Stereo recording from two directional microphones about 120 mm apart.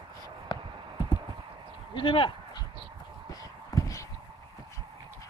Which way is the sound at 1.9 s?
45° left (ahead or behind).